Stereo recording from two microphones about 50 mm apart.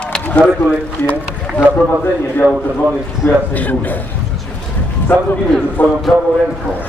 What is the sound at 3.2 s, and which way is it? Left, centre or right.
Speech, left.